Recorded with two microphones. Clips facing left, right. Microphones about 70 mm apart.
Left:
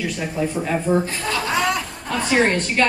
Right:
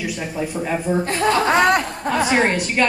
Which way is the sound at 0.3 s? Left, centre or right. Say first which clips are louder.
Left 1 dB; centre.